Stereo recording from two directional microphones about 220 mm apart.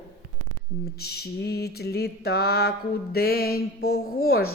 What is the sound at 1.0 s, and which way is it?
Mantra, 45° left (ahead or behind).